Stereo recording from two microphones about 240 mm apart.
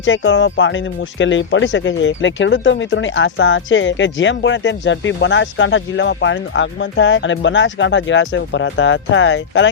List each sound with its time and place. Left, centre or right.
0.0 s speech: left